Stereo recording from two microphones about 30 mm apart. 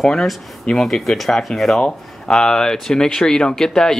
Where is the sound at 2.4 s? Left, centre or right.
Left.